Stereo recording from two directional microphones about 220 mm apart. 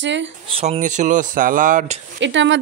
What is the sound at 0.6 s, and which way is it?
Speech, 30° right (ahead or behind).